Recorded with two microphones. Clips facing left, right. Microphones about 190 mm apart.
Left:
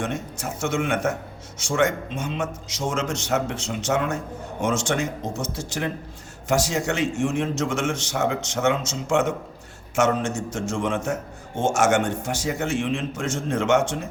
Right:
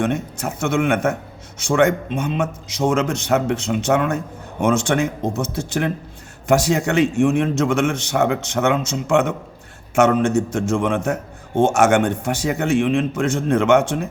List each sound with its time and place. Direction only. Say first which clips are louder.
0.0 s a man's voice: right 7 dB; 60° right (ahead or behind)